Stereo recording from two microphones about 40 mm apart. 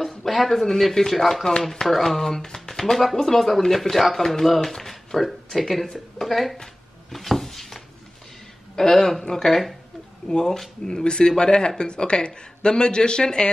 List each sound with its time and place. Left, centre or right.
0.2 s speech: centre
4.7 s a sound: centre
5.2 s speech: centre
6.6 s a sound: centre
8.7 s speech: centre
10.2 s speech: centre